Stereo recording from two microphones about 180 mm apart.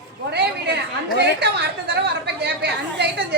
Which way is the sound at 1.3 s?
65° right (ahead or behind).